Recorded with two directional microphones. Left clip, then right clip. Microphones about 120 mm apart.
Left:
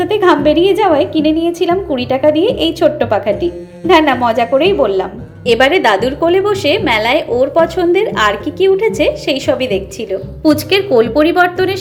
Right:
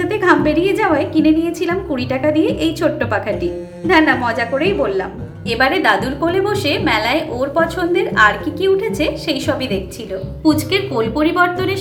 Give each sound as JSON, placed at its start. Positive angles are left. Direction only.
{"t": 0.0, "sound": "a woman's voice", "side_deg": 25}
{"t": 5.5, "sound": "a woman's voice", "side_deg": 45}
{"t": 10.4, "sound": "a woman's voice", "side_deg": 50}